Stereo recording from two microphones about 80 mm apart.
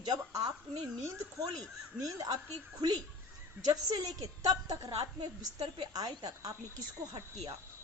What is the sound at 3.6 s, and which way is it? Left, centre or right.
A woman's voice, right.